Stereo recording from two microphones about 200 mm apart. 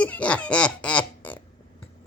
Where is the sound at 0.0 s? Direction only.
5° left (ahead or behind).